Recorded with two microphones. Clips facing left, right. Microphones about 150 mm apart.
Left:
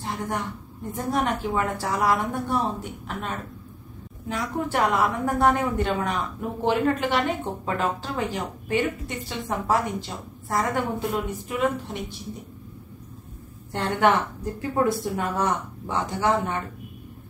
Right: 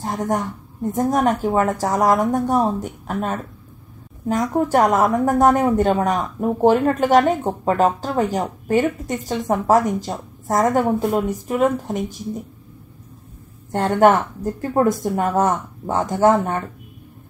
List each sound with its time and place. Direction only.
0.0 s a woman's voice: 45° right (ahead or behind)
13.7 s a woman's voice: 45° right (ahead or behind)